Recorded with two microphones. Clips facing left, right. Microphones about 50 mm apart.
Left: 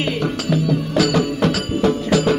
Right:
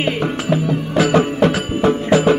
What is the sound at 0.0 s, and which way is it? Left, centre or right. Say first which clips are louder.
Music: right 2 dB; right.